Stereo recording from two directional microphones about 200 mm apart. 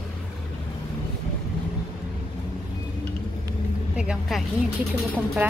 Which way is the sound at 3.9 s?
5° right (ahead or behind).